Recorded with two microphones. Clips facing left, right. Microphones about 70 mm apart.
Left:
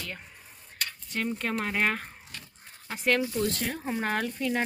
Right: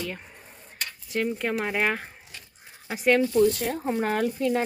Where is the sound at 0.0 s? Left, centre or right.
Centre.